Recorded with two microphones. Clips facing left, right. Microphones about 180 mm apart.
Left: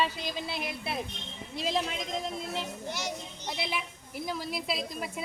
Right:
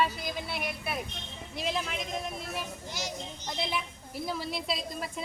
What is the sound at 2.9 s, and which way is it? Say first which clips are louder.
Speech: left 2 dB; 65° left (ahead or behind).